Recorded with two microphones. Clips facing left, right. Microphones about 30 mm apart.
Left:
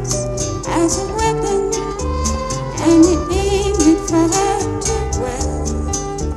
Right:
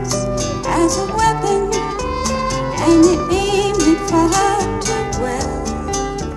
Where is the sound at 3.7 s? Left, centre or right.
Right.